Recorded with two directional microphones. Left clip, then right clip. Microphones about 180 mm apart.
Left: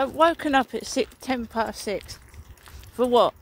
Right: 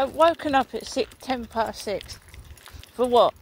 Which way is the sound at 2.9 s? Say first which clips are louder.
Right 1 dB; 60° left (ahead or behind).